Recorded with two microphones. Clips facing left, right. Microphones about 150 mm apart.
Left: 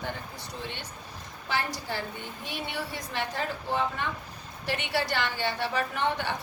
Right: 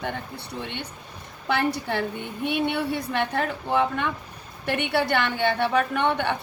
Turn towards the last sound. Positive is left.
turn(degrees=-60)  # may be behind; listen again after turning